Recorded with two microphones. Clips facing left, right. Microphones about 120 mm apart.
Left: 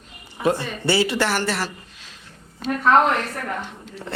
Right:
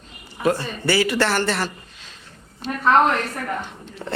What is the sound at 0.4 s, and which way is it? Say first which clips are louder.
Speech: even; 20° left (ahead or behind).